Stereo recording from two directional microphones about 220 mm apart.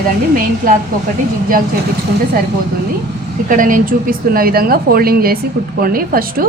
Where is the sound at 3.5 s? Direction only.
40° right (ahead or behind).